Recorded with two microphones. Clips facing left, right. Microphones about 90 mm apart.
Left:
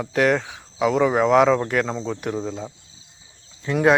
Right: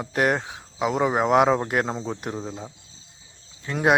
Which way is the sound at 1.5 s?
20° right (ahead or behind).